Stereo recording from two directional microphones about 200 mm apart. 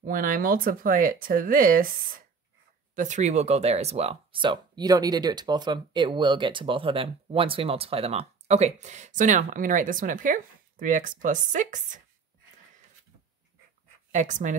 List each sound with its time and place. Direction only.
0.0 s speech: 45° right (ahead or behind)
3.0 s speech: 35° right (ahead or behind)
14.1 s speech: 40° right (ahead or behind)